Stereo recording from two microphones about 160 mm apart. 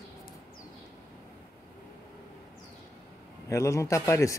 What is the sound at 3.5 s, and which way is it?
Speech, 20° left (ahead or behind).